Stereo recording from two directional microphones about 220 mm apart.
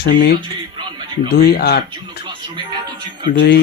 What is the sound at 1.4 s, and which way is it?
Speech, 45° left (ahead or behind).